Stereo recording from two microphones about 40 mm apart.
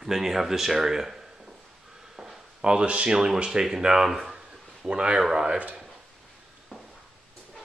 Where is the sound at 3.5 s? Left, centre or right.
Centre.